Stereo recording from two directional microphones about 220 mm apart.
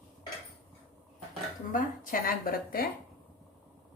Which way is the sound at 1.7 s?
40° left (ahead or behind).